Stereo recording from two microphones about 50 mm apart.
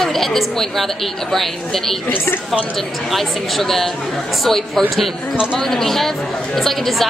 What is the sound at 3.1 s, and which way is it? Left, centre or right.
Speech, centre.